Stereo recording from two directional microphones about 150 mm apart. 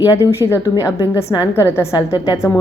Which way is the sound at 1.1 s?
20° left (ahead or behind).